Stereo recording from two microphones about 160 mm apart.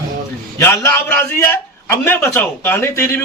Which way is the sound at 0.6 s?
15° left (ahead or behind).